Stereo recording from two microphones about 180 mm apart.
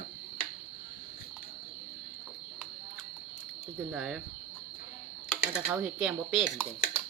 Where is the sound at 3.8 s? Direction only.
5° right (ahead or behind).